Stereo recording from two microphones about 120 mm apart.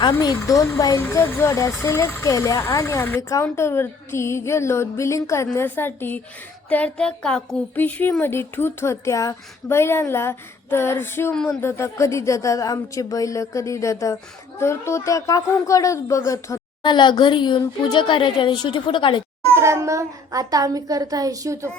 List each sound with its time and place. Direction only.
0.0 s speech: 40° left (ahead or behind)
1.0 s speech: 20° left (ahead or behind)
16.8 s a woman's voice: 40° left (ahead or behind)
19.5 s a woman's voice: 25° right (ahead or behind)